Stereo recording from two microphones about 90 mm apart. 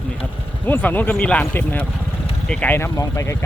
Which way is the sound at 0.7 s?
20° left (ahead or behind).